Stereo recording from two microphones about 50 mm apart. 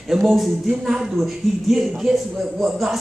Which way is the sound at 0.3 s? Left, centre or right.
Centre.